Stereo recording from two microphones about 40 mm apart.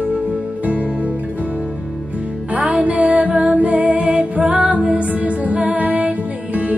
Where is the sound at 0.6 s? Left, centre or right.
Right.